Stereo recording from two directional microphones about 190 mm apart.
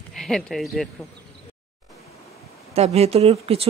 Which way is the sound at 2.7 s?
35° right (ahead or behind).